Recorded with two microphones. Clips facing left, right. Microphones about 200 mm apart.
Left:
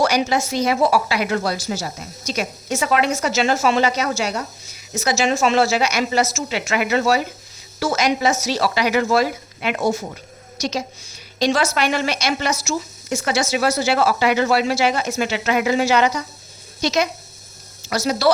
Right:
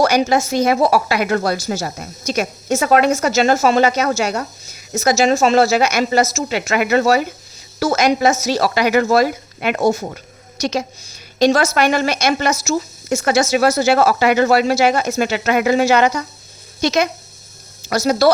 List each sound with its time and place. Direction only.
0.0 s a woman's voice: 45° right (ahead or behind)